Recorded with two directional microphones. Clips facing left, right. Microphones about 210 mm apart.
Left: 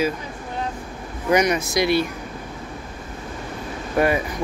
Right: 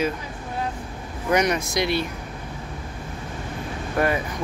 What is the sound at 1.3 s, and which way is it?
Speech, centre (ahead or behind).